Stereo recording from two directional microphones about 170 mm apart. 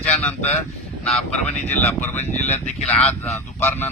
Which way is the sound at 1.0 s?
5° left (ahead or behind).